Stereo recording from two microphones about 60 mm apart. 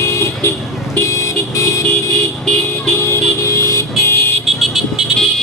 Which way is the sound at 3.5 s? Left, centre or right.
Left.